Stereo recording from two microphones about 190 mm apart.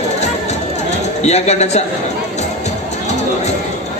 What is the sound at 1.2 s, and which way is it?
Speech, 35° left (ahead or behind).